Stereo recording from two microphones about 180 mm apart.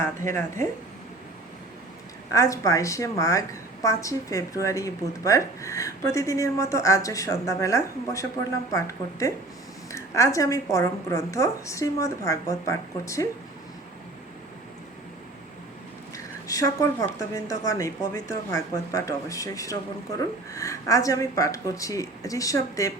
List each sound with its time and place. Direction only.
0.0 s a woman's voice: 15° left (ahead or behind)
2.3 s a woman's voice: 20° left (ahead or behind)
16.1 s a woman's voice: 20° left (ahead or behind)